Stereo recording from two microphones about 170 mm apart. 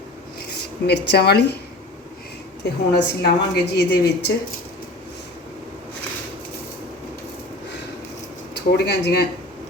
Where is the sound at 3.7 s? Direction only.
80° left.